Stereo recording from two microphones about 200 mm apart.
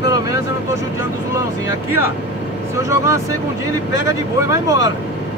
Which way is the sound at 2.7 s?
15° right (ahead or behind).